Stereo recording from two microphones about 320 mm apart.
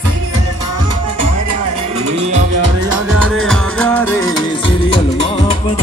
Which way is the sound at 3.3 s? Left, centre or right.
Right.